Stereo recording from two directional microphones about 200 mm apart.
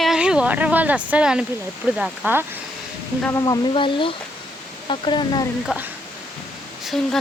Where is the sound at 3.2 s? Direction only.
20° left (ahead or behind).